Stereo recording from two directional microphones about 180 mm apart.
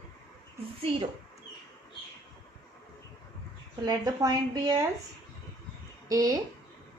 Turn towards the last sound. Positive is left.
turn(degrees=-20)  # may be behind; listen again after turning